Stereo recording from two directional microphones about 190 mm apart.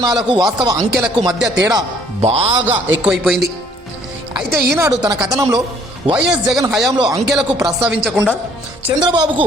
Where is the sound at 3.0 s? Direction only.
Centre (ahead or behind).